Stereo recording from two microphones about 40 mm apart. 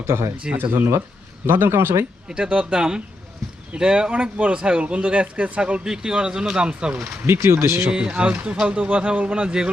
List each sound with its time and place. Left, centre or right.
0.5 s speech: right
1.5 s speech: right
2.3 s speech: right
6.7 s speech: right
7.3 s speech: right
8.2 s speech: right